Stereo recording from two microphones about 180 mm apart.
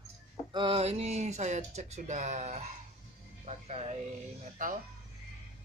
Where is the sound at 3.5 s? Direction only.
35° right (ahead or behind).